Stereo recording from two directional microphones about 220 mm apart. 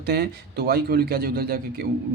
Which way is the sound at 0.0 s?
45° right (ahead or behind).